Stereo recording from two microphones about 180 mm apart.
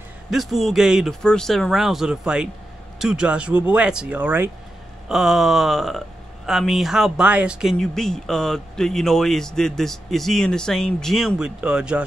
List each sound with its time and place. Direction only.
0.3 s speech: centre (ahead or behind)